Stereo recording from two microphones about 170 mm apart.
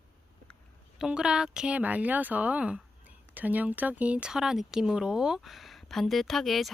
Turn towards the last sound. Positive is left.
turn(degrees=0)  # may be behind; listen again after turning